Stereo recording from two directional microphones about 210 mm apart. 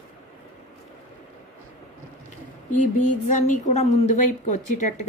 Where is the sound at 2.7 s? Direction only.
35° left (ahead or behind).